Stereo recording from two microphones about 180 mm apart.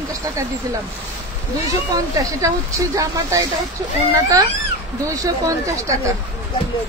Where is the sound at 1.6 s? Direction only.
20° right (ahead or behind).